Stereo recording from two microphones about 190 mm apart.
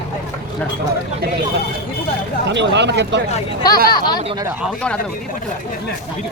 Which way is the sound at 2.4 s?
65° right (ahead or behind).